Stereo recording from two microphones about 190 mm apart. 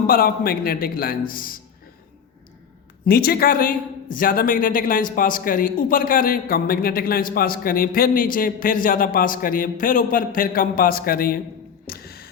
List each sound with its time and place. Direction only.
0.1 s a man's voice: 50° left (ahead or behind)
3.1 s a man's voice: 55° left (ahead or behind)
11.9 s music: 55° left (ahead or behind)